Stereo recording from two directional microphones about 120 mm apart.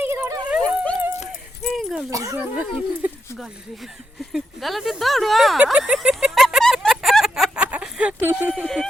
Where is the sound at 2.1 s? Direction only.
25° right (ahead or behind).